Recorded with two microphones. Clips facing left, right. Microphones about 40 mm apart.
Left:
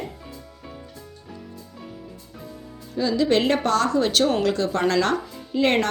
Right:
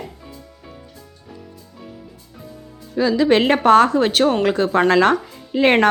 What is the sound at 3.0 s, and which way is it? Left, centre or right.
Speech, right.